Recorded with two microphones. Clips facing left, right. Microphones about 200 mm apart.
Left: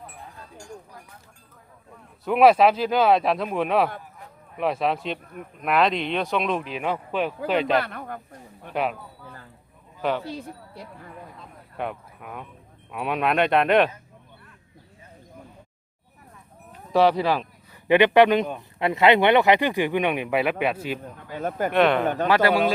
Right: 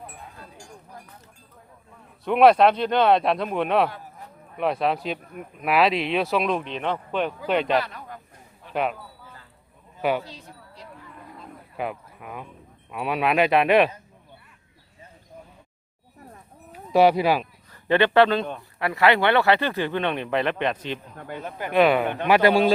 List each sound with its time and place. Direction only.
2.2 s speech: centre (ahead or behind)
7.8 s speech: 55° left (ahead or behind)
8.7 s speech: centre (ahead or behind)
10.0 s speech: 10° right (ahead or behind)
11.8 s speech: centre (ahead or behind)
16.7 s speech: 10° right (ahead or behind)
17.7 s speech: 15° left (ahead or behind)
21.7 s speech: 5° right (ahead or behind)
22.0 s speech: 40° left (ahead or behind)
22.3 s speech: 20° right (ahead or behind)